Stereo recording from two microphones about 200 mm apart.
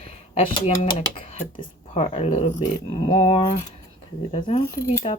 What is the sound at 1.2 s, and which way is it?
Speech, 30° left (ahead or behind).